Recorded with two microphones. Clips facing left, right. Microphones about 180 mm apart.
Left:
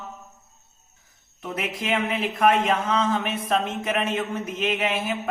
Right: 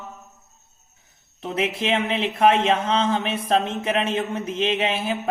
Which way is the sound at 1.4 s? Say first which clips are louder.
Right 5 dB; 30° right (ahead or behind).